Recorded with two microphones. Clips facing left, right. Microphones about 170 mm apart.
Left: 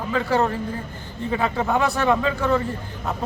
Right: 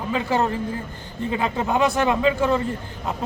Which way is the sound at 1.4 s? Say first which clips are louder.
Right 1 dB; 15° right (ahead or behind).